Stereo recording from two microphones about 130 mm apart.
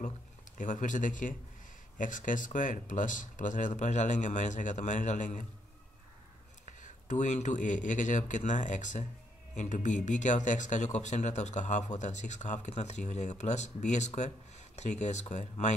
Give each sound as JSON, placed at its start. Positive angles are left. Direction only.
{"t": 0.6, "sound": "speech", "side_deg": 75}
{"t": 6.6, "sound": "speech", "side_deg": 75}